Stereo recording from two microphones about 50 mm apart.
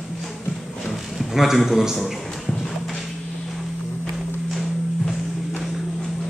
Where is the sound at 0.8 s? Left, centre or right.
Centre.